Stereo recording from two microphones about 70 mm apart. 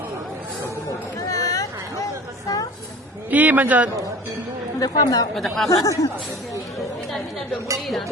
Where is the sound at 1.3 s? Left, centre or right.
Left.